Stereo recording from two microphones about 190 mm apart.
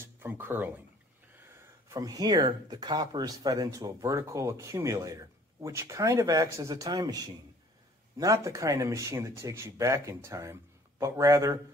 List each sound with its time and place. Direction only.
0.0 s speech: 10° right (ahead or behind)
1.9 s speech: 20° right (ahead or behind)